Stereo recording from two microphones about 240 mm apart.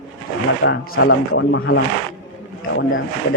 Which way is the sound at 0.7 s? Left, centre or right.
Left.